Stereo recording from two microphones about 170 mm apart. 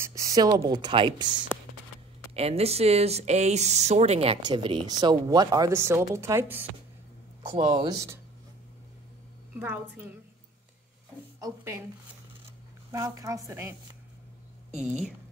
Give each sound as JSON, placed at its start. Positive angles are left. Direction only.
{"t": 0.0, "sound": "speech", "side_deg": -20}
{"t": 2.3, "sound": "speech", "side_deg": -35}
{"t": 4.4, "sound": "speech", "side_deg": -25}
{"t": 7.5, "sound": "speech", "side_deg": -30}
{"t": 9.6, "sound": "a woman's voice", "side_deg": -10}
{"t": 11.4, "sound": "a woman's voice", "side_deg": -15}
{"t": 12.9, "sound": "speech", "side_deg": -20}